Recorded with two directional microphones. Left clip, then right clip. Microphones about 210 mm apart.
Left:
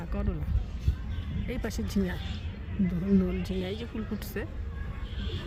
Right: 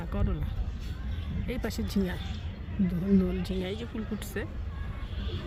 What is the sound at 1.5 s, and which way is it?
Speech, 5° right (ahead or behind).